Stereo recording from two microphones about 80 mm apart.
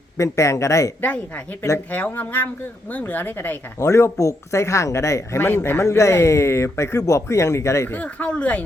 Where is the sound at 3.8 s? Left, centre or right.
Left.